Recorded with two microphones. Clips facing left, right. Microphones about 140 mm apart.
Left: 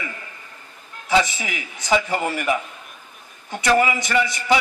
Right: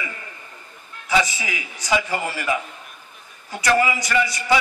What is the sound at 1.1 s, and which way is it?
Speech, 25° left (ahead or behind).